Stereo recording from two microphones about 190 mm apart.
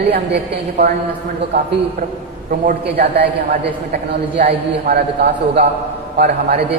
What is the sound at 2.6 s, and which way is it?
A man's voice, 50° right (ahead or behind).